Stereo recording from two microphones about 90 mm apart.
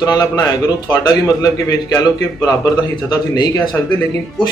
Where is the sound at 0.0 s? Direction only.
40° left (ahead or behind).